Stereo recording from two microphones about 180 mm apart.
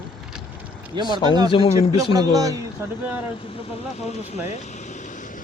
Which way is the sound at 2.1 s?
20° right (ahead or behind).